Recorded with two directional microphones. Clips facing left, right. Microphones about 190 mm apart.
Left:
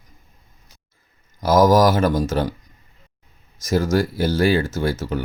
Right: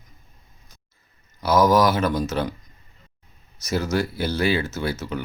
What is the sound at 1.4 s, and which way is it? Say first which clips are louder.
Speech: left 3 dB; 45° left (ahead or behind).